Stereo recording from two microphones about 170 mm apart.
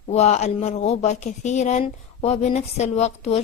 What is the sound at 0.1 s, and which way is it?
Speech, 40° left (ahead or behind).